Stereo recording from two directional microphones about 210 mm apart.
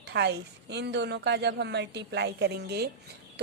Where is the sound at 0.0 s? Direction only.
55° right (ahead or behind).